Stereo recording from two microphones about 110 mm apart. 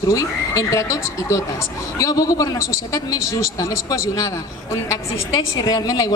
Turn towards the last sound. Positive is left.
turn(degrees=35)  # may be behind; listen again after turning